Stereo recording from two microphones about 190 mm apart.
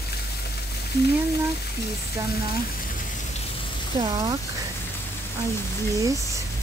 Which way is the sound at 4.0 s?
20° right (ahead or behind).